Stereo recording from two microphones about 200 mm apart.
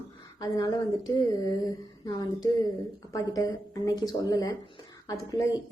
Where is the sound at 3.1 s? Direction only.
15° left (ahead or behind).